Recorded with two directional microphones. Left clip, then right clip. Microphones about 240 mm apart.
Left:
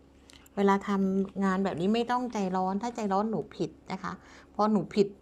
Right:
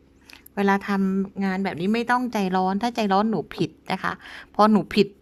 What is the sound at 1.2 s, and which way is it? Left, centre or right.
A woman's voice, right.